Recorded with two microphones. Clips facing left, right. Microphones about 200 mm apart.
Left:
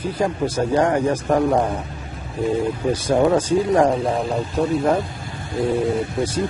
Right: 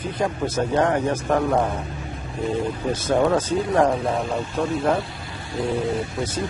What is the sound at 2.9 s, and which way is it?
Speech, 15° left (ahead or behind).